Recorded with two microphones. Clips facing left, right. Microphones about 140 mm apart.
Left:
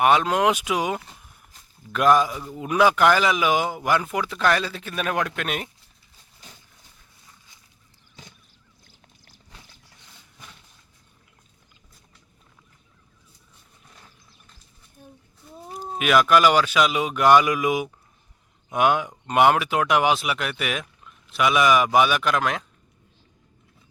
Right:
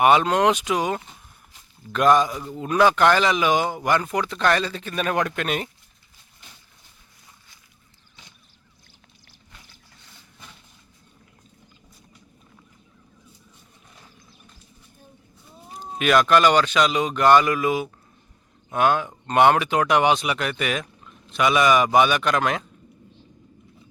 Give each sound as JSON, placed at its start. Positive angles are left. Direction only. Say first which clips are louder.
{"t": 0.0, "sound": "a man's voice", "louder": "right 2 dB", "side_deg": 0}
{"t": 16.0, "sound": "a man's voice", "louder": "even", "side_deg": 5}